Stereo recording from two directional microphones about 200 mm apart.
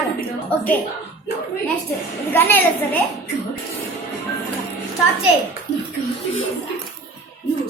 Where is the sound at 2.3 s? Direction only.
10° left (ahead or behind).